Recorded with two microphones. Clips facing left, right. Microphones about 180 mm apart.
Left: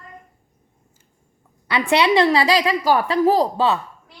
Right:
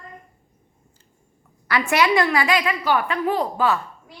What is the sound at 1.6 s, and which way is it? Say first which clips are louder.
A woman's voice: left 2 dB; 25° left (ahead or behind).